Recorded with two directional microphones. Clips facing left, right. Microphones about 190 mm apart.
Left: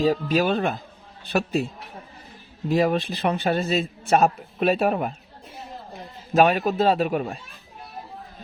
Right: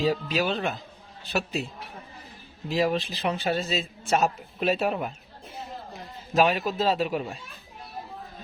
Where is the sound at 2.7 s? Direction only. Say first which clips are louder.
Left 4 dB; 55° left (ahead or behind).